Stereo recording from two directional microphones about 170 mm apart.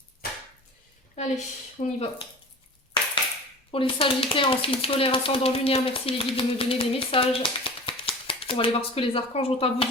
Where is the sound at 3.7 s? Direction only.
30° left (ahead or behind).